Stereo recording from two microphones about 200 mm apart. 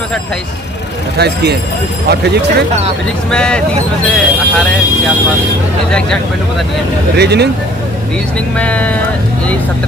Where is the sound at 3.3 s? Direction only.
5° left (ahead or behind).